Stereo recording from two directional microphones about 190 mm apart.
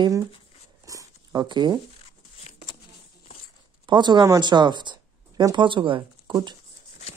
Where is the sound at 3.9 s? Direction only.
25° right (ahead or behind).